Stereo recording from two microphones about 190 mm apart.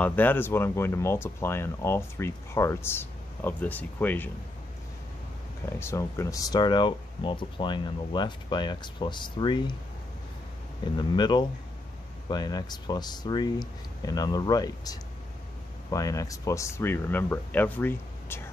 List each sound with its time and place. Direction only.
0.0 s speech: 10° left (ahead or behind)
5.8 s speech: 15° left (ahead or behind)
10.8 s speech: 25° left (ahead or behind)